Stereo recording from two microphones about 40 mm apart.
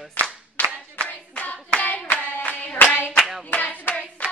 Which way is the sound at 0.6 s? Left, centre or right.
Left.